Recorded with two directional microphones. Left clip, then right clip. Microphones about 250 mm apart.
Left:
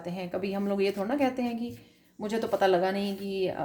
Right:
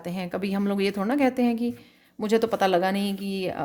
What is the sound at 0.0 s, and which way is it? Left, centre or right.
Speech, right.